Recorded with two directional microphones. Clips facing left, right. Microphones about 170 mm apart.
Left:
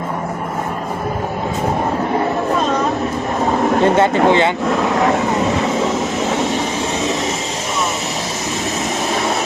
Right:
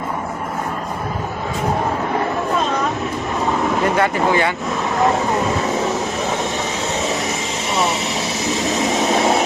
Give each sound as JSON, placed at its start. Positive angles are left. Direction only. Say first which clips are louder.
{"t": 3.8, "sound": "speech", "louder": "left 5 dB", "side_deg": 25}